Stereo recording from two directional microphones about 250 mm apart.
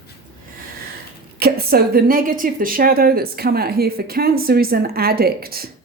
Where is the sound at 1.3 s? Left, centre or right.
Right.